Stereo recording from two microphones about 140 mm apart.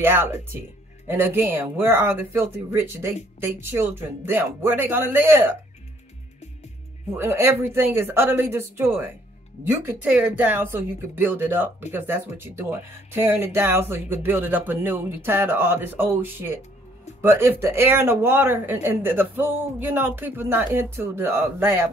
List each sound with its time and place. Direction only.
0.0 s speech: 15° right (ahead or behind)
7.2 s speech: 15° right (ahead or behind)